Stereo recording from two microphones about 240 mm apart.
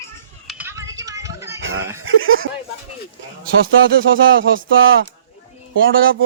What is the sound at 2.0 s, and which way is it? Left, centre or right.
Speech, right.